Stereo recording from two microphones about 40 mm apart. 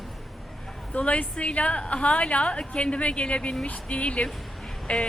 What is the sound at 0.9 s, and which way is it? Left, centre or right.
A woman's voice, left.